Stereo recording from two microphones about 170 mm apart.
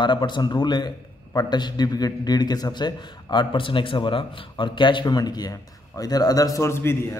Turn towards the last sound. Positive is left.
turn(degrees=15)  # may be behind; listen again after turning